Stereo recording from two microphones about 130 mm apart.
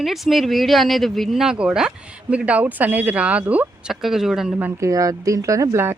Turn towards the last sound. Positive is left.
turn(degrees=-20)  # may be behind; listen again after turning